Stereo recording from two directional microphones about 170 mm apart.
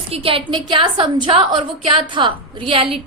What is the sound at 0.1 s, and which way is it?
A woman's voice, 35° right (ahead or behind).